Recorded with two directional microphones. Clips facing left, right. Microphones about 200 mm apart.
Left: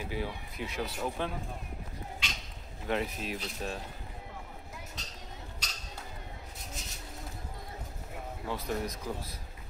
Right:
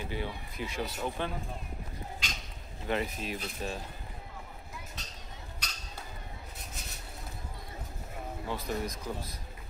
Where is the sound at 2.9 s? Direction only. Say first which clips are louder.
Even; centre (ahead or behind).